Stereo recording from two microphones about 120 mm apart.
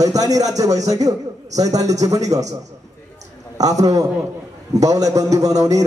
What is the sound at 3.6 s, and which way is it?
A man's voice, 30° right (ahead or behind).